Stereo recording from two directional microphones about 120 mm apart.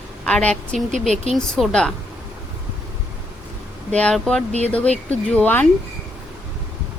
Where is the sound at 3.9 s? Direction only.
10° left (ahead or behind).